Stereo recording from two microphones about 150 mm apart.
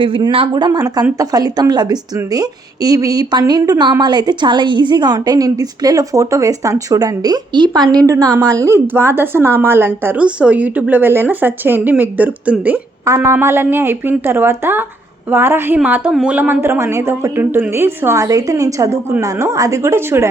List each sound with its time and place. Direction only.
0.0 s a woman's voice: 35° right (ahead or behind); by 20.2 s 15° right (ahead or behind)